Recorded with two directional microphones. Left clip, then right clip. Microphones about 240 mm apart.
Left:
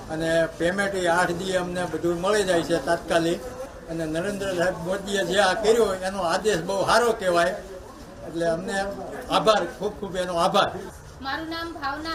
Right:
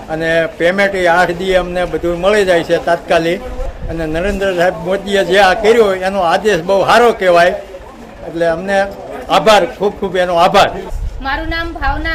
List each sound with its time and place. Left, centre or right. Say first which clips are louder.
0.1 s a man's voice: right 9 dB; left